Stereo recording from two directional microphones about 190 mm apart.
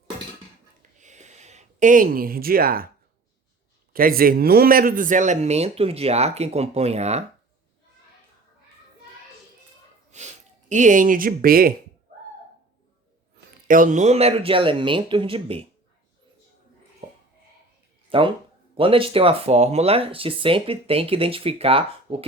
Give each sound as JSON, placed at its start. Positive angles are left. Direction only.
{"t": 0.9, "sound": "a sound", "side_deg": -40}
{"t": 3.9, "sound": "speech", "side_deg": -50}
{"t": 10.1, "sound": "sniff", "side_deg": -35}
{"t": 10.7, "sound": "speech", "side_deg": -40}
{"t": 13.7, "sound": "speech", "side_deg": -45}
{"t": 18.1, "sound": "speech", "side_deg": -30}